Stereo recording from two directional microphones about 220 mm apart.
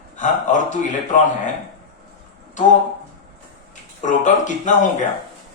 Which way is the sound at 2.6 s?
35° left (ahead or behind).